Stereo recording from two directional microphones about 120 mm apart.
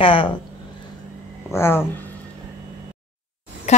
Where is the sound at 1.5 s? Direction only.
20° left (ahead or behind).